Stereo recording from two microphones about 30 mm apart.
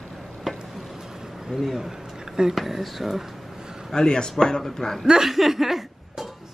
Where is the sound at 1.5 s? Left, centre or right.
Left.